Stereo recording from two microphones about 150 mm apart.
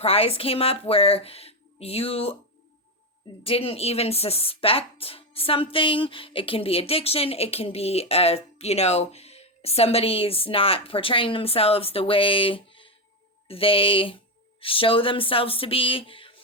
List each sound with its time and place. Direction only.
0.0 s a woman's voice: 40° left (ahead or behind)
3.4 s a woman's voice: 40° left (ahead or behind)